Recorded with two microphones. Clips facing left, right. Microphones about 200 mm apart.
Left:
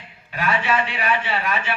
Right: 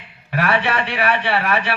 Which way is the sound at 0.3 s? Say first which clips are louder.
Right 3 dB; 65° right (ahead or behind).